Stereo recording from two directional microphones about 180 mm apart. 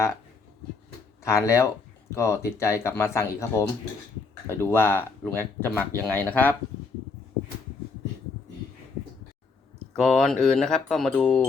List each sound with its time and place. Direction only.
1.2 s speech: 15° left (ahead or behind)
9.9 s speech: centre (ahead or behind)